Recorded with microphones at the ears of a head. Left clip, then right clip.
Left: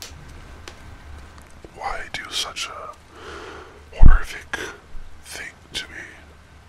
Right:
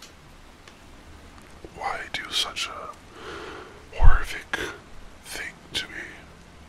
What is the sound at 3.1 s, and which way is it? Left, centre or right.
Snort, centre.